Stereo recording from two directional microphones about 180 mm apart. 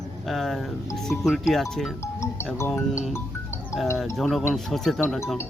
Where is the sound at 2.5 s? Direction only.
15° left (ahead or behind).